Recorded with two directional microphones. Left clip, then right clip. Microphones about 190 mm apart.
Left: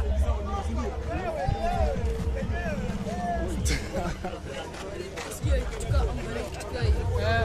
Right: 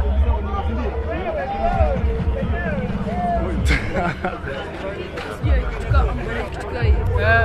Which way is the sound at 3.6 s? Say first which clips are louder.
Right 10 dB; 5° left (ahead or behind).